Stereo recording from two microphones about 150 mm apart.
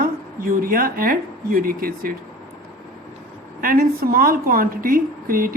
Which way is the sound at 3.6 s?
75° right (ahead or behind).